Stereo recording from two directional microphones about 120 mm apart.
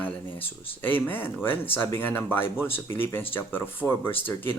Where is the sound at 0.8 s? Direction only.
15° left (ahead or behind).